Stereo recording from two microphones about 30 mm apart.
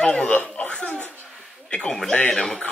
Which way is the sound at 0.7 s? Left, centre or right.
Left.